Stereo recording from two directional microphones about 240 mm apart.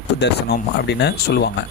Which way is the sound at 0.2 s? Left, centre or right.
Left.